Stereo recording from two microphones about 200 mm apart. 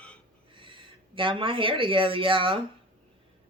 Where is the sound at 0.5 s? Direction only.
25° right (ahead or behind).